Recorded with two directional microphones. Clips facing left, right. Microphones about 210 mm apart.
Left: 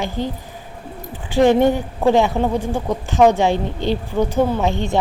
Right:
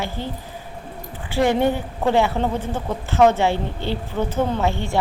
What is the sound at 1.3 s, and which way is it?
A woman's voice, 15° left (ahead or behind).